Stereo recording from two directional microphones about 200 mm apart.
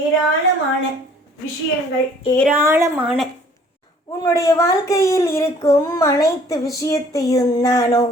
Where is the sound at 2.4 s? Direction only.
10° right (ahead or behind).